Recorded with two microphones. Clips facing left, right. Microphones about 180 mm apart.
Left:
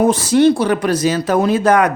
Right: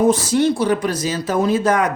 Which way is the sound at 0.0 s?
65° left (ahead or behind).